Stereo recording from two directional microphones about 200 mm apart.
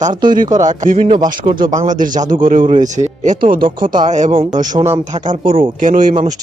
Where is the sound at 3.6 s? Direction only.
25° right (ahead or behind).